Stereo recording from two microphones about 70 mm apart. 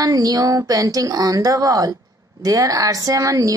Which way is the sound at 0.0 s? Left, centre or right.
Right.